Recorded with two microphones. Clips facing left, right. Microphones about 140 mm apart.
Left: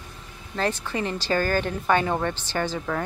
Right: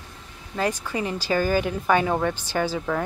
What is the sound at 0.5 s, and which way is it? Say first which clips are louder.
Speech: right 1 dB; 10° right (ahead or behind).